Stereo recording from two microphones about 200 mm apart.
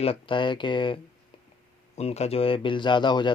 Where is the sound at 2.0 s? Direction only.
30° left (ahead or behind).